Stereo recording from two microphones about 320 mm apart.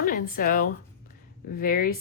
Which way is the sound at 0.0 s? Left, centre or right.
Left.